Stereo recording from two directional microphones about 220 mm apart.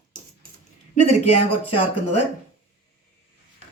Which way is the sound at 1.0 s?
30° left (ahead or behind).